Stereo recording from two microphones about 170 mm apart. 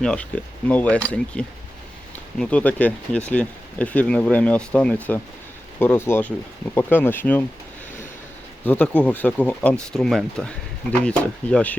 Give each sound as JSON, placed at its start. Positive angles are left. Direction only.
{"t": 0.0, "sound": "speech", "side_deg": 5}
{"t": 8.6, "sound": "speech", "side_deg": 10}